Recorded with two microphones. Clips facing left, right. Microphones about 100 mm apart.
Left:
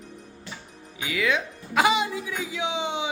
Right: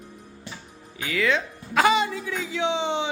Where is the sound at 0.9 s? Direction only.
10° left (ahead or behind).